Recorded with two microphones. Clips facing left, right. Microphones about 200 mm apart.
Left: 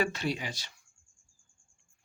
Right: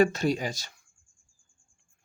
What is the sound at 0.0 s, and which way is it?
Speech, 45° right (ahead or behind).